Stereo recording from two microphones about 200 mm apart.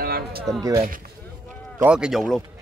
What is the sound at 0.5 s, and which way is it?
Speech, 15° right (ahead or behind).